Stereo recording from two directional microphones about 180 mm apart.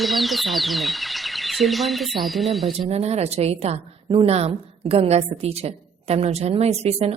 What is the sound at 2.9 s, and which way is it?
A woman's voice, 35° right (ahead or behind).